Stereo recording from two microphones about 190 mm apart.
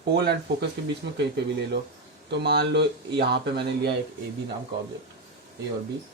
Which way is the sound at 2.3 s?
60° right (ahead or behind).